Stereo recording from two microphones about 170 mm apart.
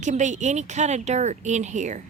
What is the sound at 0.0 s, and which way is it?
A woman's voice, 45° right (ahead or behind).